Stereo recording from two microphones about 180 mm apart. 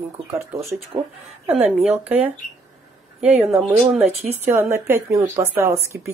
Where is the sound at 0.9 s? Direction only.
20° right (ahead or behind).